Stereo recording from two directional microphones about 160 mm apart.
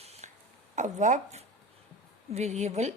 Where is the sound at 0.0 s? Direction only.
40° right (ahead or behind).